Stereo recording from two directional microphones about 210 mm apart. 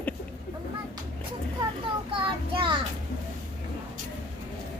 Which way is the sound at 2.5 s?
25° right (ahead or behind).